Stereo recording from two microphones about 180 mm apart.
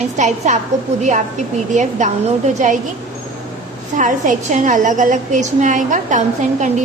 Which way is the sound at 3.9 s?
45° right (ahead or behind).